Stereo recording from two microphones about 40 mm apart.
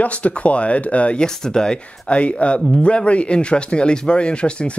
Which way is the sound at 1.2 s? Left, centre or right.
Centre.